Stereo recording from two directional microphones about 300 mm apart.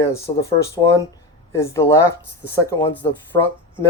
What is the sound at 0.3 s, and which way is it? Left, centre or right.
Speech, centre.